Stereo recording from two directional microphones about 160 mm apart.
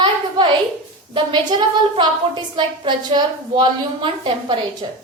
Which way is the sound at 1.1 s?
30° right (ahead or behind).